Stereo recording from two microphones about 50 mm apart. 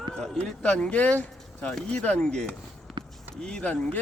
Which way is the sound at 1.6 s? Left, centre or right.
Centre.